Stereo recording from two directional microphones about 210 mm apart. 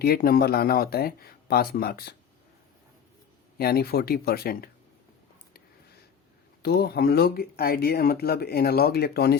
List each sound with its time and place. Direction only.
0.0 s speech: 45° left (ahead or behind)
3.6 s speech: 45° left (ahead or behind)
6.6 s speech: 50° left (ahead or behind)